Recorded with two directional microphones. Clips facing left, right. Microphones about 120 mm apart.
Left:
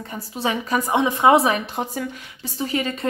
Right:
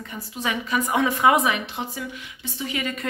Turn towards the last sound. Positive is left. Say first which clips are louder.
# left 4 dB
turn(degrees=35)  # may be behind; listen again after turning